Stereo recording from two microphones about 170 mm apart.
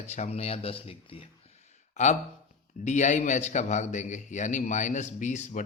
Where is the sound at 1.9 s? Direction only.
45° left (ahead or behind).